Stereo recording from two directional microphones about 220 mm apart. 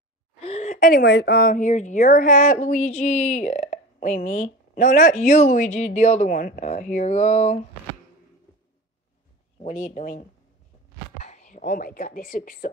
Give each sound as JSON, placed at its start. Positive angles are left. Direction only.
{"t": 0.4, "sound": "a woman's voice", "side_deg": 30}
{"t": 9.6, "sound": "a woman's voice", "side_deg": 30}
{"t": 11.2, "sound": "speech", "side_deg": 35}